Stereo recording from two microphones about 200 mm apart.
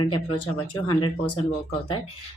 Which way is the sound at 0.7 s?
25° left (ahead or behind).